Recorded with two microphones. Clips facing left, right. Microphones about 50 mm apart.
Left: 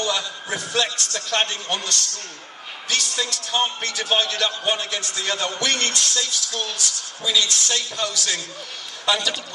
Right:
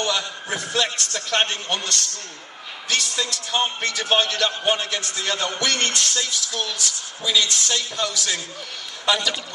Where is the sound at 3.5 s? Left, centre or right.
Right.